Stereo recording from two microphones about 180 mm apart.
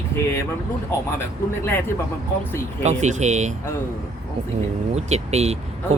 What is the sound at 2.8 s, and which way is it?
Speech, 40° right (ahead or behind).